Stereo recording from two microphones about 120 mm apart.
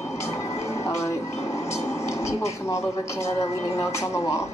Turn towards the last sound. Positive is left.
turn(degrees=25)  # may be behind; listen again after turning